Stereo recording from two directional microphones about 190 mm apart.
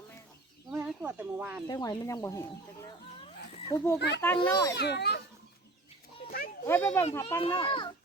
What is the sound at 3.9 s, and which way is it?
Speech, 60° left (ahead or behind).